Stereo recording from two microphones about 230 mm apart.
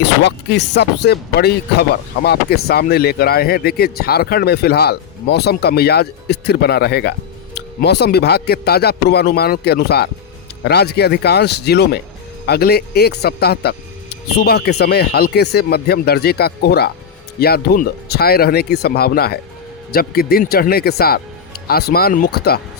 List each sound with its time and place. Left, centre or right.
0.0 s speech: left